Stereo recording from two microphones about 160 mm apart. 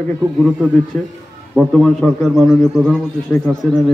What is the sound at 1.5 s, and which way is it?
A man's voice, centre (ahead or behind).